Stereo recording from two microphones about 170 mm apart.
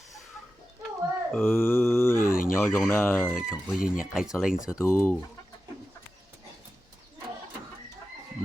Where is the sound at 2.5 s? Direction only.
15° left (ahead or behind).